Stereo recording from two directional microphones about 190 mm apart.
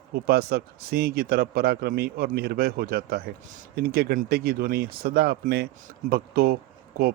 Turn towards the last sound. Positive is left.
turn(degrees=-55)  # may be behind; listen again after turning